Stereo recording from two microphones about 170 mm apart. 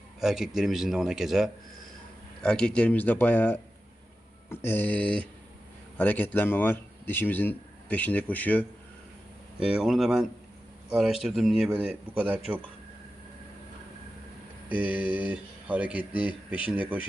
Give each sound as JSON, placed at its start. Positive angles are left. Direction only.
{"t": 0.2, "sound": "a man's voice", "side_deg": 0}
{"t": 9.6, "sound": "a man's voice", "side_deg": -5}
{"t": 14.7, "sound": "speech", "side_deg": -10}